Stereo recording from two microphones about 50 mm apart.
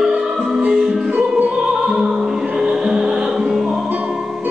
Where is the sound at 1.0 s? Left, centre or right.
Right.